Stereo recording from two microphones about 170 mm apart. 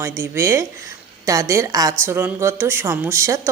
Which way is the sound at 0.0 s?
15° right (ahead or behind).